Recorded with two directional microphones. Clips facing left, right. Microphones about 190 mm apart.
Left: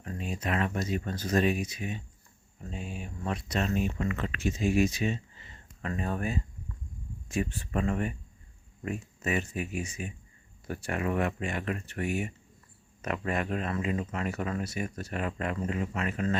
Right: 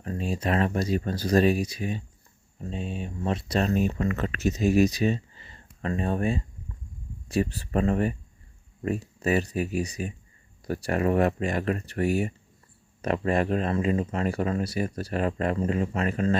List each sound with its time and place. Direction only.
0.0 s speech: 35° right (ahead or behind)